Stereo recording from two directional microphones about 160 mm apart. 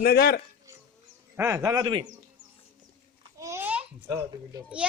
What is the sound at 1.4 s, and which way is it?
Speech, 20° right (ahead or behind).